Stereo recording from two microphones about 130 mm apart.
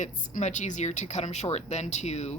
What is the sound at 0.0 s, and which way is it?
Speech, 70° left (ahead or behind).